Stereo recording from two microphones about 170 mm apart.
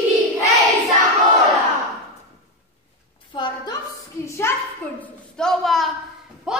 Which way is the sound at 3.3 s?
25° left (ahead or behind).